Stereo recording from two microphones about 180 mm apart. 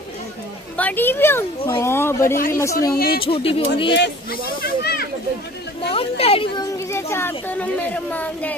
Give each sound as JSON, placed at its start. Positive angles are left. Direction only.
{"t": 0.7, "sound": "speech", "side_deg": 10}
{"t": 3.1, "sound": "speech", "side_deg": 30}
{"t": 3.9, "sound": "speech", "side_deg": 75}
{"t": 4.8, "sound": "a sound", "side_deg": 60}
{"t": 5.9, "sound": "children playing", "side_deg": 30}